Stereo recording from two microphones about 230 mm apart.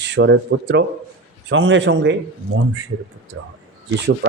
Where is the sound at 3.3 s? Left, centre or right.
Right.